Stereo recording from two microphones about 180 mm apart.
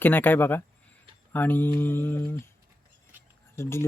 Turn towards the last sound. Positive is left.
turn(degrees=15)  # may be behind; listen again after turning